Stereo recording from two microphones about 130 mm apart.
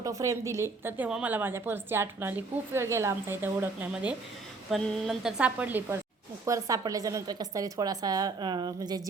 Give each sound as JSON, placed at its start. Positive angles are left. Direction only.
{"t": 0.0, "sound": "a woman's voice", "side_deg": -25}
{"t": 6.4, "sound": "a woman's voice", "side_deg": -25}